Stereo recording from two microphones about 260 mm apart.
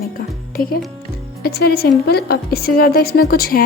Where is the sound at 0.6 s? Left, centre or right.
Left.